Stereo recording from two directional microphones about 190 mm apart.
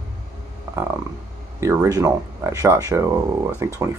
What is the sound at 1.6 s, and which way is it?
Speech, 15° right (ahead or behind).